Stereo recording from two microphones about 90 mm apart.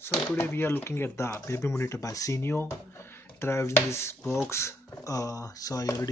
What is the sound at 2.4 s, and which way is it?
Speech, 30° left (ahead or behind).